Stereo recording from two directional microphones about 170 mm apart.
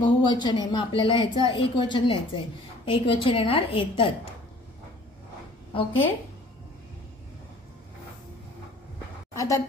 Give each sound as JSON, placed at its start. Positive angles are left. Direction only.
{"t": 0.0, "sound": "a woman's voice", "side_deg": 25}
{"t": 5.7, "sound": "a woman's voice", "side_deg": 30}
{"t": 9.3, "sound": "a woman's voice", "side_deg": 20}